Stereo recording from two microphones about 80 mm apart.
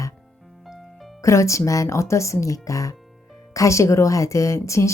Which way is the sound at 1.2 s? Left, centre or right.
Left.